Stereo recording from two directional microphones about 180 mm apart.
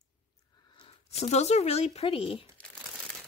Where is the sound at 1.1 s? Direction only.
35° left (ahead or behind).